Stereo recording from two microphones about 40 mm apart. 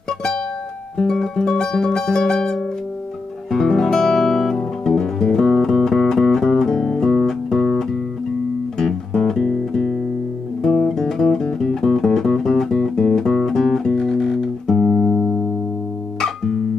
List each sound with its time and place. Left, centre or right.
0.9 s music: centre
3.5 s guitar: centre
8.7 s music: centre